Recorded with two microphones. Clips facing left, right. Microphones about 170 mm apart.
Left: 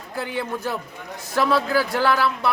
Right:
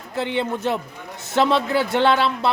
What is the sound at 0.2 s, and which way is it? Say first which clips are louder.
A man's voice: right 4 dB; 25° right (ahead or behind).